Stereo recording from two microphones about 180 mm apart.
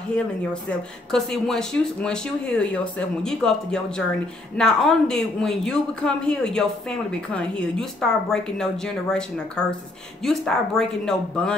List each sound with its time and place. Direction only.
0.1 s speech: 5° left (ahead or behind)